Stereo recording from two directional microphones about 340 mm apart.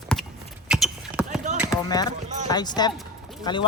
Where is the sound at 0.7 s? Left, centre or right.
Centre.